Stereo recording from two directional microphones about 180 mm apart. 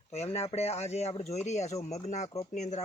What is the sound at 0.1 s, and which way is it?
Speech, 35° left (ahead or behind).